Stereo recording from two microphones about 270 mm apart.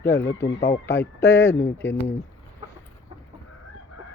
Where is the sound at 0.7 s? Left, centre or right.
Centre.